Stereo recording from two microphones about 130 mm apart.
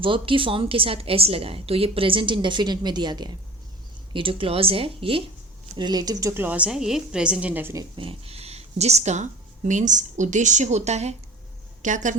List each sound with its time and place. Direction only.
0.0 s a woman's voice: 40° right (ahead or behind)
5.7 s a woman's voice: 35° right (ahead or behind); by 7.8 s 15° right (ahead or behind)
7.9 s speech: 45° right (ahead or behind)
11.8 s a woman's voice: 70° right (ahead or behind)